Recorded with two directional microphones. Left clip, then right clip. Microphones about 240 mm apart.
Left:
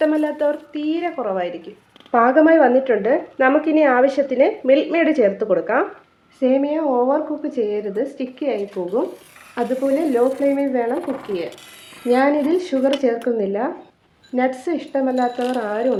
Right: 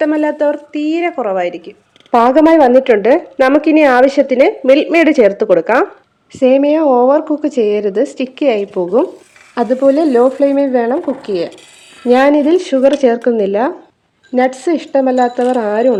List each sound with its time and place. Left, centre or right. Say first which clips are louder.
0.0 s a woman's voice: right 5 dB; right
12.0 s a woman's voice: right 7 dB; right